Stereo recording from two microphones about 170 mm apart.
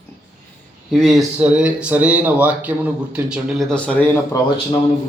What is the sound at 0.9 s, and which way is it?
Speech, centre (ahead or behind).